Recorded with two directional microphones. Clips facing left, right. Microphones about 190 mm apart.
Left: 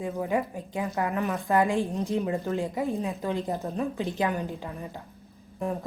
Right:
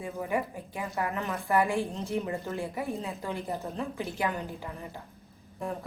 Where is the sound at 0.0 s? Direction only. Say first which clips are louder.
Left 4 dB; 15° left (ahead or behind).